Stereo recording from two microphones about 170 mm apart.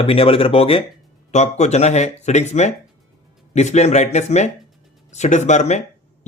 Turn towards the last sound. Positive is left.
turn(degrees=45)  # may be behind; listen again after turning